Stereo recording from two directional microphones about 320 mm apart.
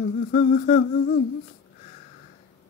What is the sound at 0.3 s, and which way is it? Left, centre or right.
Female singing, left.